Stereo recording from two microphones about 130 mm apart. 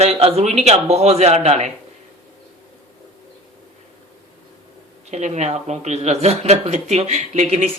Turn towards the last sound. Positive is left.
turn(degrees=-55)  # may be behind; listen again after turning